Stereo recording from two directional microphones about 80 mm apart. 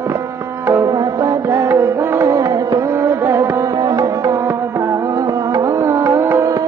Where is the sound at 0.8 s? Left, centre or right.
Right.